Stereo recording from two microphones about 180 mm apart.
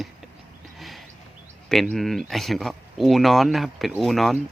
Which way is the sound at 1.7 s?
Centre (ahead or behind).